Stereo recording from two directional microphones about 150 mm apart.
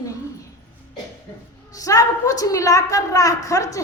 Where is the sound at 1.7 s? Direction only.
25° left (ahead or behind).